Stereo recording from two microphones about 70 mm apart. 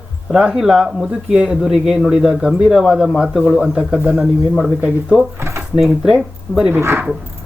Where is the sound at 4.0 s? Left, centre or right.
Right.